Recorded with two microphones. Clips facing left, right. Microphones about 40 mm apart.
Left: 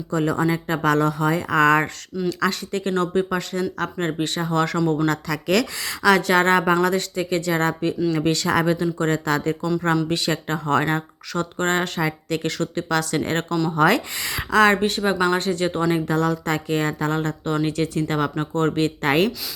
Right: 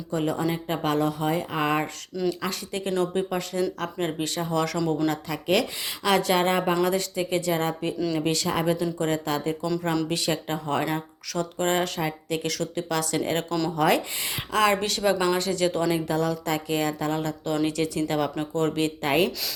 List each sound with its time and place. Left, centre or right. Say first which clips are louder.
0.1 s speech: left 5 dB; left
2.1 s speech: left 1 dB; centre
2.5 s speech: left 4 dB; left
5.0 s speech: left 3 dB; left
8.8 s speech: left 4 dB; left
14.8 s speech: left 3 dB; left
16.0 s speech: left 4 dB; left